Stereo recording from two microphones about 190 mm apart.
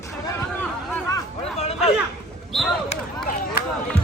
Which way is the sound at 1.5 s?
35° left (ahead or behind).